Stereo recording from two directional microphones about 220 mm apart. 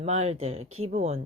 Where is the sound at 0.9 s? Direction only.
30° right (ahead or behind).